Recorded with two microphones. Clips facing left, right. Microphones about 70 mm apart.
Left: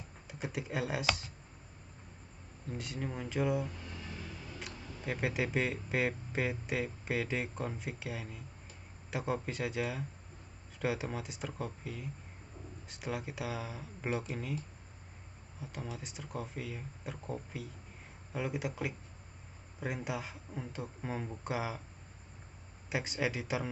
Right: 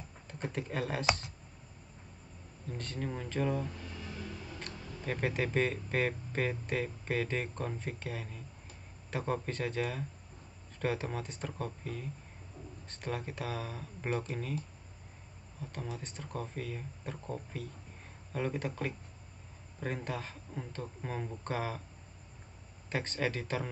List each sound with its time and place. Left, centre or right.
0.3 s speech: centre
2.7 s a man's voice: centre
15.6 s a man's voice: centre
22.8 s a man's voice: centre